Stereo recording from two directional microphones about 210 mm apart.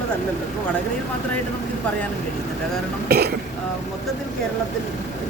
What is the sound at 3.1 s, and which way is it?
Speech, 50° right (ahead or behind).